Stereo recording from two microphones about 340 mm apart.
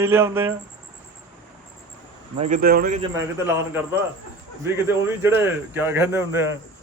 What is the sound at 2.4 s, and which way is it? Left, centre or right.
Speech, right.